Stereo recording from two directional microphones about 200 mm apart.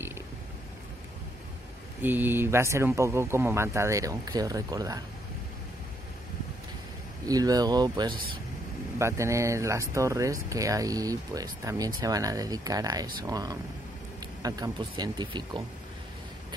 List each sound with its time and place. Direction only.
2.0 s speech: 10° right (ahead or behind)
7.2 s speech: 20° right (ahead or behind)